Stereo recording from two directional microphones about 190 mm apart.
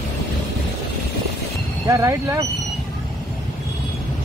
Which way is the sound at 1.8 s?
15° right (ahead or behind).